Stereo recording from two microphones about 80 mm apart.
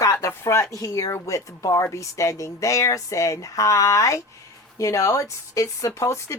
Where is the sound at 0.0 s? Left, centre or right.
Left.